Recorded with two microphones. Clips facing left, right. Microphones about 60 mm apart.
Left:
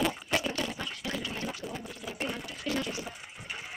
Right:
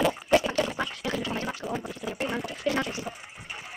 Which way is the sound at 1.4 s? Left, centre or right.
Right.